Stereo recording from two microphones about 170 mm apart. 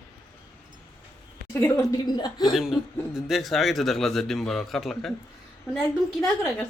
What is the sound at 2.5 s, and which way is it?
Speech, centre (ahead or behind).